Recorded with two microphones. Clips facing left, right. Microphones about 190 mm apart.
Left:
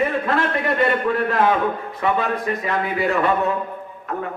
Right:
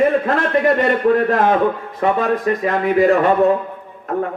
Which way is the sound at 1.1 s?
45° right (ahead or behind).